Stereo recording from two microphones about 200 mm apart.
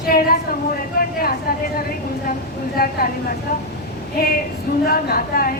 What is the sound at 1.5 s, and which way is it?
Speech, 50° left (ahead or behind).